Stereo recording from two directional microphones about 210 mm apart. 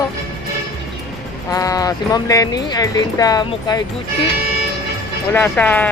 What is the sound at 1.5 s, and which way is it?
Speech, 15° left (ahead or behind).